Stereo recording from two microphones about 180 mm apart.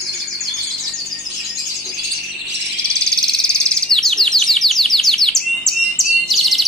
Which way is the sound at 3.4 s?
5° left (ahead or behind).